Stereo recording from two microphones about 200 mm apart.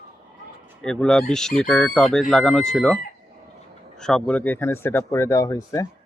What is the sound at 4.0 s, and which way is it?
Speech, 5° left (ahead or behind).